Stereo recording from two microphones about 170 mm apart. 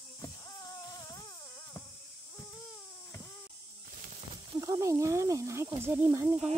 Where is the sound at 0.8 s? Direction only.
20° left (ahead or behind).